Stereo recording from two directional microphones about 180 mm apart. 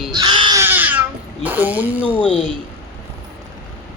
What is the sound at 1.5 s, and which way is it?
Speech, 10° right (ahead or behind).